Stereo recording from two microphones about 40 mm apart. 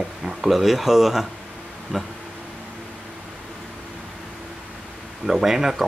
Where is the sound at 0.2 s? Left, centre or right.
Centre.